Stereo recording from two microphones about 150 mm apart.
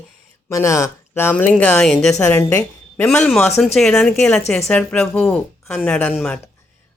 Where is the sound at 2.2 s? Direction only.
15° left (ahead or behind).